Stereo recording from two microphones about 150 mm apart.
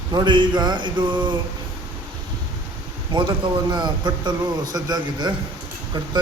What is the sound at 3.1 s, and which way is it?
A man's voice, 30° right (ahead or behind).